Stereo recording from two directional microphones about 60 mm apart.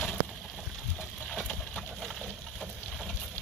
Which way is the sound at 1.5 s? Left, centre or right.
Centre.